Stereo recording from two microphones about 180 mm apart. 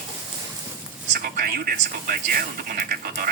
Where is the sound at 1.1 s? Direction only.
55° right (ahead or behind).